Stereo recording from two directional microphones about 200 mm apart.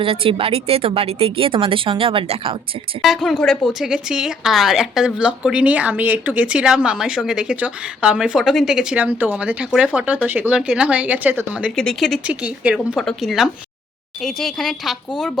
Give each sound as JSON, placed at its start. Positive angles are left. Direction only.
{"t": 0.0, "sound": "speech", "side_deg": -25}
{"t": 3.0, "sound": "speech", "side_deg": 0}